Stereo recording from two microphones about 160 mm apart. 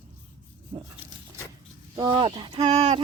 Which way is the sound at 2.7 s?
45° right (ahead or behind).